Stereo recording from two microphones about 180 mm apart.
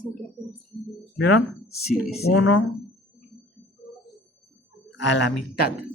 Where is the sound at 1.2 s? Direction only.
80° left.